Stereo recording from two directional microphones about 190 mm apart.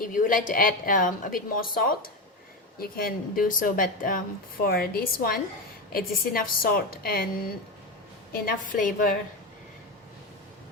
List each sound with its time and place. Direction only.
0.0 s a woman's voice: 45° left (ahead or behind)
8.3 s a woman's voice: 50° left (ahead or behind)